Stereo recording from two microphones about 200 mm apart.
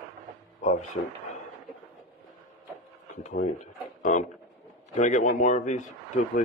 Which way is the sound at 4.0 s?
40° left (ahead or behind).